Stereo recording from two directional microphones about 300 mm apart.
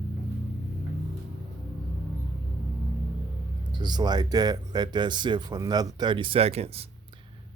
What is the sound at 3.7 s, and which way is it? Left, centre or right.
Speech, centre.